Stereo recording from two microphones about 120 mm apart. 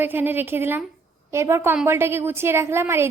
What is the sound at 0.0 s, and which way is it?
A woman's voice, 15° right (ahead or behind).